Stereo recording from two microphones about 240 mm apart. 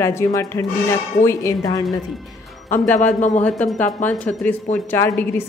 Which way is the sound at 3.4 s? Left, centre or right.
Centre.